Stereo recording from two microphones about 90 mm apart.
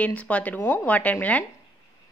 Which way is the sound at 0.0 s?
15° left (ahead or behind).